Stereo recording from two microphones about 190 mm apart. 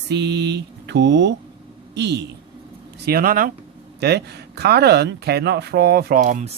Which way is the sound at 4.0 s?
60° right (ahead or behind).